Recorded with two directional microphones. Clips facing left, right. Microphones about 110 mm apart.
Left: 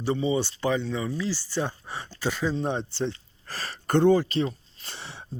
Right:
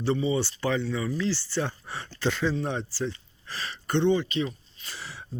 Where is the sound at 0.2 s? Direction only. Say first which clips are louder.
Left 1 dB; 20° left (ahead or behind).